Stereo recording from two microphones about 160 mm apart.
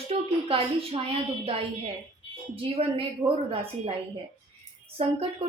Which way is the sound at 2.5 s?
35° right (ahead or behind).